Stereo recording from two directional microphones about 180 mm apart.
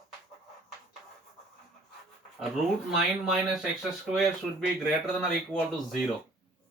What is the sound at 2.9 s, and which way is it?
Speech, centre (ahead or behind).